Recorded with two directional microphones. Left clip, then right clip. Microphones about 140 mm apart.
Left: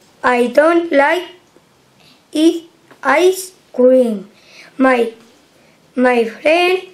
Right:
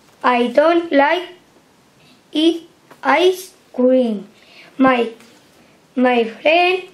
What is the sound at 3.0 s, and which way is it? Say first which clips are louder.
A woman's voice: left 2 dB; 15° left (ahead or behind).